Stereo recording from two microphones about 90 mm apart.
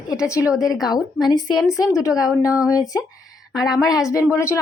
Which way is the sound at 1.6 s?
40° left (ahead or behind).